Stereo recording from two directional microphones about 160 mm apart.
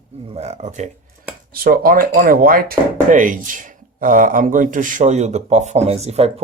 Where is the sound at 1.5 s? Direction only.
70° right (ahead or behind).